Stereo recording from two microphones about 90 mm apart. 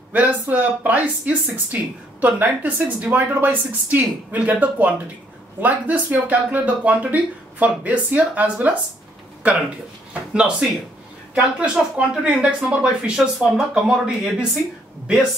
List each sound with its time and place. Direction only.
0.1 s speech: 15° right (ahead or behind)
10.3 s speech: 10° right (ahead or behind)